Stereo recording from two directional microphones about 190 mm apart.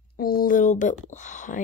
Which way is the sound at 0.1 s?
50° left (ahead or behind).